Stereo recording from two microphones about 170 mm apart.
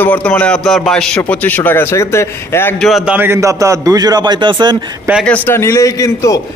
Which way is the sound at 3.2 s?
15° right (ahead or behind).